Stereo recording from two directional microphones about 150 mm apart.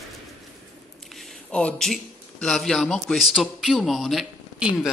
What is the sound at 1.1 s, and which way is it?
A man's voice, 5° left (ahead or behind).